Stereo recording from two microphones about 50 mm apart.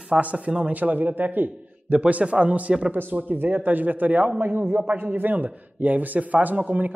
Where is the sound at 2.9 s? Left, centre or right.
Right.